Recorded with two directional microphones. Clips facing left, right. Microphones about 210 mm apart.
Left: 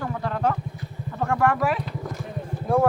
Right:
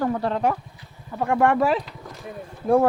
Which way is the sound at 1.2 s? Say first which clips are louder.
Right 3 dB; 20° right (ahead or behind).